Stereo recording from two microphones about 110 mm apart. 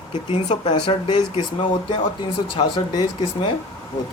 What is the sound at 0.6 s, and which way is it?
Speech, 50° left (ahead or behind).